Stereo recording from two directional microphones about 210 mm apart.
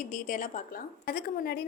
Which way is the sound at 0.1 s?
40° left (ahead or behind).